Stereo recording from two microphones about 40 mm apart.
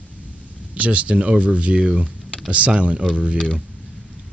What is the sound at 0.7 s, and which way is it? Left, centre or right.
Speech, right.